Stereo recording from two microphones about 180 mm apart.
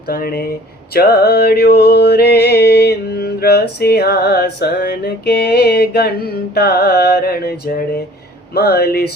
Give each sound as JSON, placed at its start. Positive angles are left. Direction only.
{"t": 0.1, "sound": "music", "side_deg": 55}